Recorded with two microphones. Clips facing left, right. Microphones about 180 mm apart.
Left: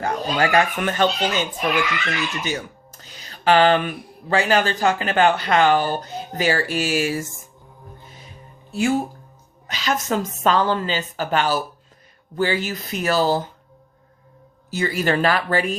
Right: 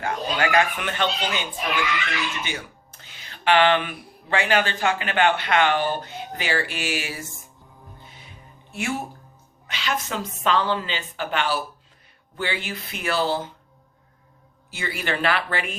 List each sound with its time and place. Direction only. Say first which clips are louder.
0.0 s speech: left 3 dB; 35° left (ahead or behind)
2.4 s speech: left 6 dB; 40° left (ahead or behind)
8.7 s speech: left 8 dB; 30° left (ahead or behind)
14.7 s speech: left 7 dB; 40° left (ahead or behind)